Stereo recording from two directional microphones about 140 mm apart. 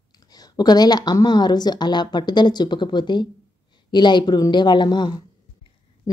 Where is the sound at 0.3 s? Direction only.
30° left (ahead or behind).